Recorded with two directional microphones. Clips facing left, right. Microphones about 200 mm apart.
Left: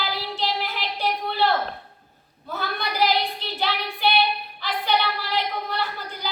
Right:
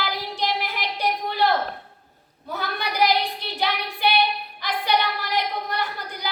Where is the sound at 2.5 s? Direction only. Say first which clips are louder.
Even; 15° right (ahead or behind).